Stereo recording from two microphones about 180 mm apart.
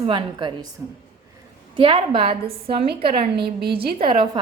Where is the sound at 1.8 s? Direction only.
30° right (ahead or behind).